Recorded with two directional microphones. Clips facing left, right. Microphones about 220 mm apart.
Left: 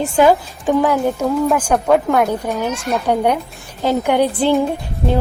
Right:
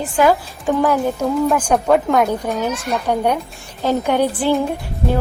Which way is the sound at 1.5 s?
5° left (ahead or behind).